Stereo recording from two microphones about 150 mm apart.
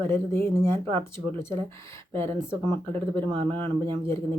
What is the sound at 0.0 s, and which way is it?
Speech, 15° left (ahead or behind).